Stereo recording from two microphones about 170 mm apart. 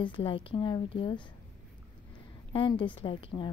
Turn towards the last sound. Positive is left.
turn(degrees=30)  # may be behind; listen again after turning